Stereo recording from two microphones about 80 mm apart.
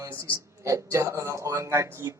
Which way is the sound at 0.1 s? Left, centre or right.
Right.